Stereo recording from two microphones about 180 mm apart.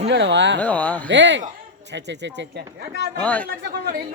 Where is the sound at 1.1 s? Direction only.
80° right.